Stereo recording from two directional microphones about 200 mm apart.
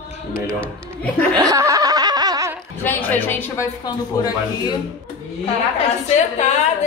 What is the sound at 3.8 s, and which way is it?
Speech, 20° left (ahead or behind).